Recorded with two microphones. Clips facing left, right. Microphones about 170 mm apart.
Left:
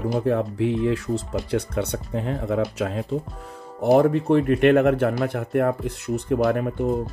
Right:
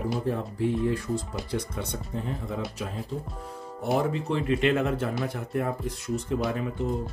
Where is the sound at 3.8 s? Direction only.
55° left (ahead or behind).